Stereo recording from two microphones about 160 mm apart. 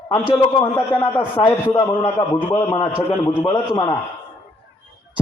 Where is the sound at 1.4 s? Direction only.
35° left (ahead or behind).